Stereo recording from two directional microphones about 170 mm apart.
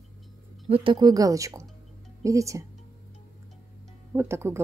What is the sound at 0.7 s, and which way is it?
A woman's voice, 30° right (ahead or behind).